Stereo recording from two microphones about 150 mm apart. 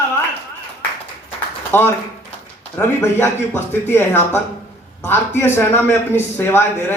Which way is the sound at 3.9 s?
15° left (ahead or behind).